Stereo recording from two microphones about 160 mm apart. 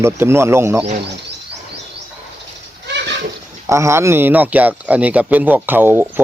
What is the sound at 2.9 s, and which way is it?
Goat, 90° right.